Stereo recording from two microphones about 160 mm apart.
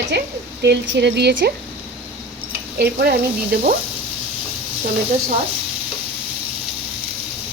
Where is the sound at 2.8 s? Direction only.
70° right (ahead or behind).